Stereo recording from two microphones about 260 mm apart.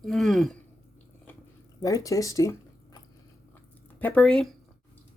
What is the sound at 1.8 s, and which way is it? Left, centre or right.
A woman's voice, centre.